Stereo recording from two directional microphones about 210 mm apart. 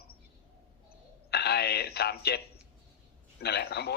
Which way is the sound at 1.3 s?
50° left (ahead or behind).